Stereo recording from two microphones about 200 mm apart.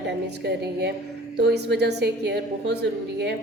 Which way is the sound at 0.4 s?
55° right (ahead or behind).